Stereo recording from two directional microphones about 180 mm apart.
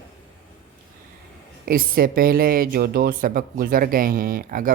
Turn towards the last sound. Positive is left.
turn(degrees=-50)  # may be behind; listen again after turning